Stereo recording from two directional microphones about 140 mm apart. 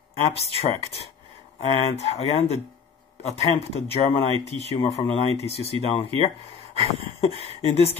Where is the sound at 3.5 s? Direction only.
45° left (ahead or behind).